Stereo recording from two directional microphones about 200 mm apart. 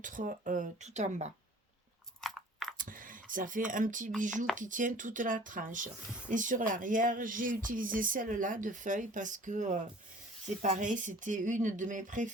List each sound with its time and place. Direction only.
0.0 s speech: 40° right (ahead or behind)
2.2 s a sound: centre (ahead or behind)
2.7 s speech: 45° right (ahead or behind)